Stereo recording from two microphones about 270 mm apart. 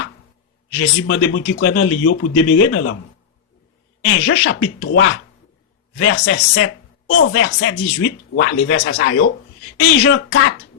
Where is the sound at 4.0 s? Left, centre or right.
Left.